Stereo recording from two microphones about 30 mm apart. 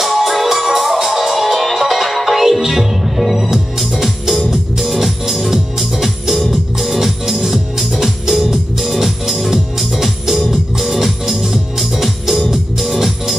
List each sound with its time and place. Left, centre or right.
0.0 s music: centre
11.9 s organ: centre
12.4 s music: centre